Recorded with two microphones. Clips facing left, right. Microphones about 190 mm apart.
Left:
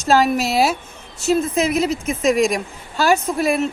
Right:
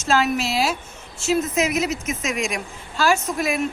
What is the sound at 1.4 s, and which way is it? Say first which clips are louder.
A woman's voice: left 2 dB; 30° left (ahead or behind).